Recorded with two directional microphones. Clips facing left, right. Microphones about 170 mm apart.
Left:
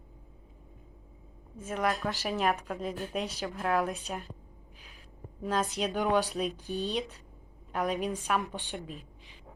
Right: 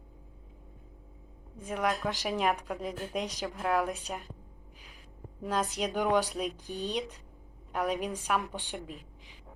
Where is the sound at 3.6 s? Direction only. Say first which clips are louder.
Even; 5° right (ahead or behind).